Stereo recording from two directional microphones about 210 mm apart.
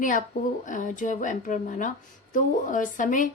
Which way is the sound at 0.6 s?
35° left (ahead or behind).